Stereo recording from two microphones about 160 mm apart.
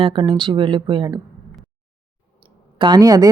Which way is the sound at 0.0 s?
35° right (ahead or behind).